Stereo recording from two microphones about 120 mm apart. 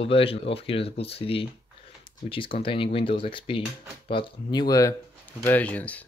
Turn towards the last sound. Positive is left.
turn(degrees=10)  # may be behind; listen again after turning